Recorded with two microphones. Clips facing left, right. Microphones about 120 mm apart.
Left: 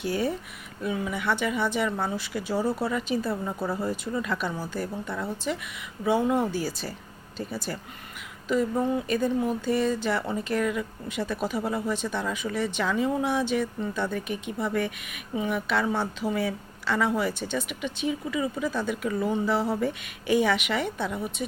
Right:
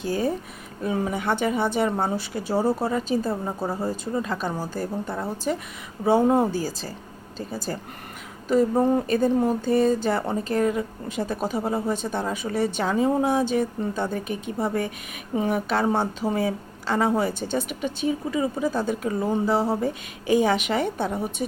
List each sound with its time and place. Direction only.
0.0 s a woman's voice: 40° right (ahead or behind)